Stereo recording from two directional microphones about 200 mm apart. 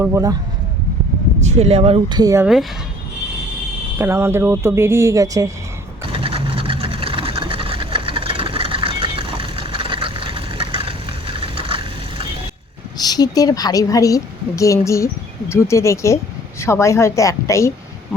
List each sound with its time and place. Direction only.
0.0 s speech: 15° right (ahead or behind)
1.5 s speech: 30° right (ahead or behind); by 2.5 s 15° right (ahead or behind)
3.9 s speech: 10° right (ahead or behind)
6.1 s sewing machine: 25° right (ahead or behind)
13.0 s a woman's voice: 20° left (ahead or behind)